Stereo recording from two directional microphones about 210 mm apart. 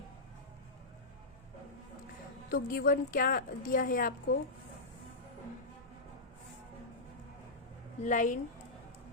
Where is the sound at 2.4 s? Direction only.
45° left (ahead or behind).